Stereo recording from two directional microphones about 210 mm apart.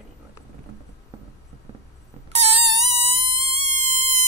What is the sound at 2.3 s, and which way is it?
Cat, 30° right (ahead or behind).